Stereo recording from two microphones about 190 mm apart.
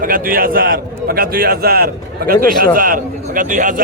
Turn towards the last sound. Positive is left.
turn(degrees=-45)  # may be behind; listen again after turning